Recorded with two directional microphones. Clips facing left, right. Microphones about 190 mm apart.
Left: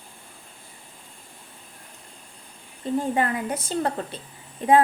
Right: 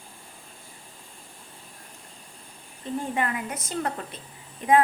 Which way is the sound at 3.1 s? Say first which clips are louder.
Left 4 dB; 35° left (ahead or behind).